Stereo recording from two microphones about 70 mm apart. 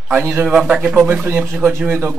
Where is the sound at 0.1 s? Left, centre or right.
Right.